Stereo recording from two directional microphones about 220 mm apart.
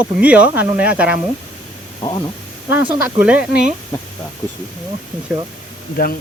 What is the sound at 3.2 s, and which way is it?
Speech, 5° right (ahead or behind).